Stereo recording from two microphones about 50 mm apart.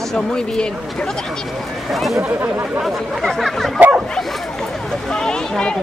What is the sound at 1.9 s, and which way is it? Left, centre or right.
Speech, centre.